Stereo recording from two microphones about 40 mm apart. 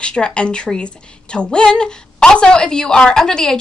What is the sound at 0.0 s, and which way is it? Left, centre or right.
A woman's voice, left.